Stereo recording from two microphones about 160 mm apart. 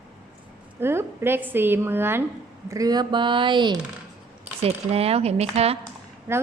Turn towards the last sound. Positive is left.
turn(degrees=-15)  # may be behind; listen again after turning